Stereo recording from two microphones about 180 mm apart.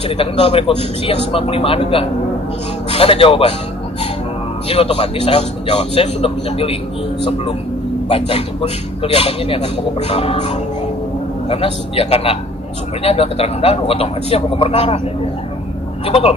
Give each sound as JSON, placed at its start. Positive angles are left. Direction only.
{"t": 0.2, "sound": "a man's voice", "side_deg": 30}
{"t": 4.6, "sound": "a man's voice", "side_deg": 35}
{"t": 8.1, "sound": "a man's voice", "side_deg": 30}
{"t": 16.1, "sound": "a man's voice", "side_deg": 35}